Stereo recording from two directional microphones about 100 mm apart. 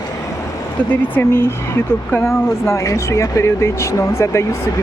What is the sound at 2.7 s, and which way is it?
Speech, 30° left (ahead or behind).